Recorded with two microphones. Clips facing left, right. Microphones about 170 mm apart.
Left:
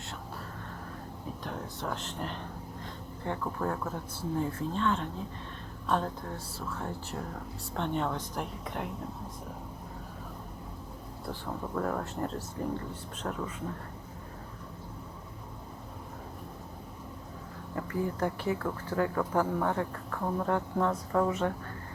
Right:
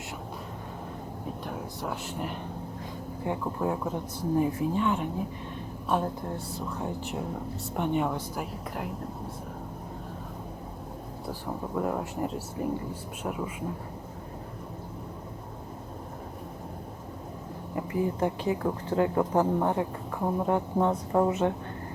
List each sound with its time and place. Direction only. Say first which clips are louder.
1.5 s speech: even; 10° right (ahead or behind)
11.3 s speech: right 2 dB; 15° right (ahead or behind)
17.7 s a woman's voice: right 4 dB; 15° right (ahead or behind)